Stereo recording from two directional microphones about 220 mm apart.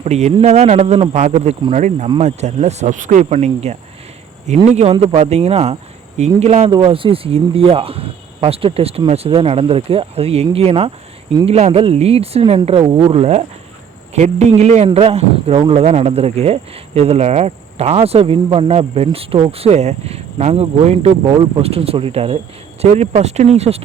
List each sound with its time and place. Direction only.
0.0 s speech: 30° right (ahead or behind)